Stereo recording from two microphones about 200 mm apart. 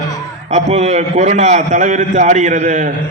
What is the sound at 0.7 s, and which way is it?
A man's voice, 35° right (ahead or behind).